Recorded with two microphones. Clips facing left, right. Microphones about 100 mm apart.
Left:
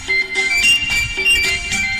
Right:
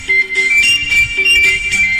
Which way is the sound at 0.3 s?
20° left (ahead or behind).